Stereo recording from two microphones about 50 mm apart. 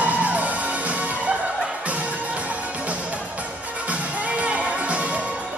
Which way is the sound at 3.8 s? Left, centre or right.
Right.